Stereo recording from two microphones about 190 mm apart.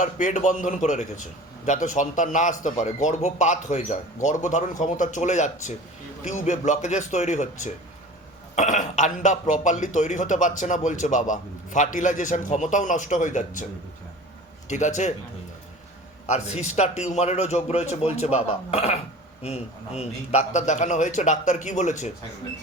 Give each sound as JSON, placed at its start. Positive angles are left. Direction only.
{"t": 0.0, "sound": "a man's voice", "side_deg": 45}
{"t": 14.7, "sound": "a man's voice", "side_deg": 40}
{"t": 16.2, "sound": "a man's voice", "side_deg": 35}